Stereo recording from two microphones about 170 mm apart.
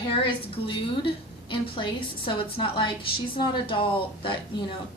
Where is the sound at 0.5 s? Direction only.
30° left (ahead or behind).